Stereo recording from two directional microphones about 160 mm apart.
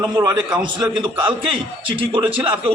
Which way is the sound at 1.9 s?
30° right (ahead or behind).